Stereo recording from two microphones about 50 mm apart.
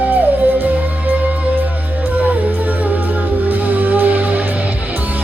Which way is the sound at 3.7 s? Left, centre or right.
Right.